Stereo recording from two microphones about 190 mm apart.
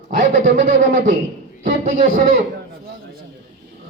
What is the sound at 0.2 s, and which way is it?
A man's voice, 45° right (ahead or behind).